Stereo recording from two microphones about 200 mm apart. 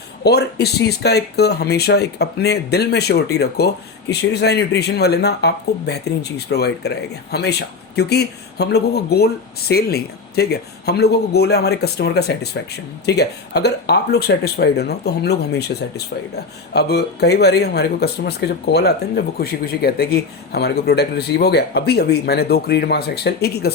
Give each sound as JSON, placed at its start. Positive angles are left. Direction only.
{"t": 0.3, "sound": "speech", "side_deg": 55}